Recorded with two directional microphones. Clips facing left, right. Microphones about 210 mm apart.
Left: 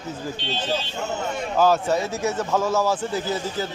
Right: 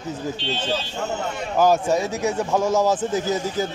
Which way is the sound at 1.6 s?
15° right (ahead or behind).